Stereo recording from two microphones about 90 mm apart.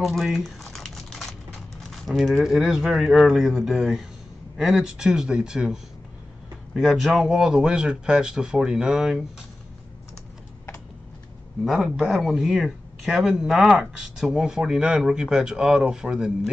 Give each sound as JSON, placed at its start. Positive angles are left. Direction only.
{"t": 0.0, "sound": "crumpling", "side_deg": 0}
{"t": 1.8, "sound": "speech", "side_deg": 0}
{"t": 11.6, "sound": "speech", "side_deg": -5}